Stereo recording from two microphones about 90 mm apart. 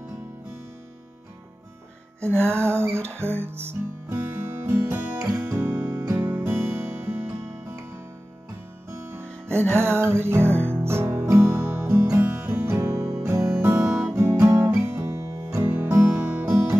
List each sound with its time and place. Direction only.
2.1 s music: 25° right (ahead or behind)
5.4 s guitar: 20° right (ahead or behind)
6.1 s music: 25° right (ahead or behind)
8.9 s music: 30° right (ahead or behind)
14.1 s guitar: 30° right (ahead or behind)
15.6 s music: 25° right (ahead or behind)